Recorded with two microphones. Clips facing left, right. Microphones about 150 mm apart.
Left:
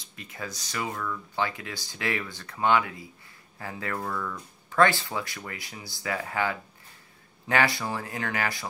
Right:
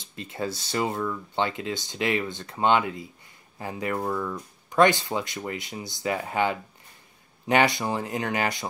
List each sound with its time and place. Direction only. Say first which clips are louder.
0.0 s speech: right 7 dB; 25° right (ahead or behind)